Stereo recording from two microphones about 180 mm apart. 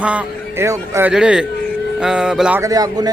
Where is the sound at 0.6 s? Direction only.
15° right (ahead or behind).